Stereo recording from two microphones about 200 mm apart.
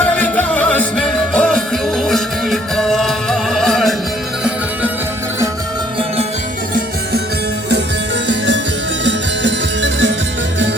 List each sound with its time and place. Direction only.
0.0 s music: 10° left (ahead or behind)
9.0 s music: 65° right (ahead or behind)